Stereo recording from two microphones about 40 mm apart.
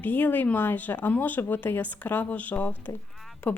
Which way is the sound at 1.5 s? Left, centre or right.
Left.